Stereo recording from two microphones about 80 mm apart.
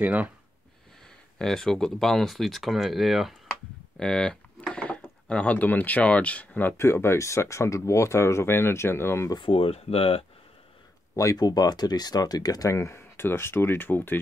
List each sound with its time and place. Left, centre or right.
0.0 s speech: centre
1.4 s speech: centre
4.0 s speech: centre
6.8 s speech: left
11.1 s speech: left
12.7 s speech: left